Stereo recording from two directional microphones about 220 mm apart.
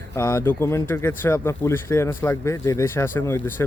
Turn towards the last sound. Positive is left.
turn(degrees=10)  # may be behind; listen again after turning